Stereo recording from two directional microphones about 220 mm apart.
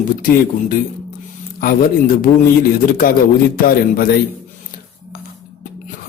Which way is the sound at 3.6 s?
40° left (ahead or behind).